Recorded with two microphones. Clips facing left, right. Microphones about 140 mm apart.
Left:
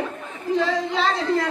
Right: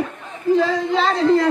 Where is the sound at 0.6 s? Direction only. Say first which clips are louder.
Right 4 dB; centre (ahead or behind).